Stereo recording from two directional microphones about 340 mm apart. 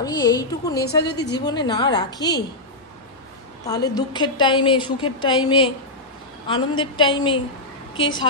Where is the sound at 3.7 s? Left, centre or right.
Centre.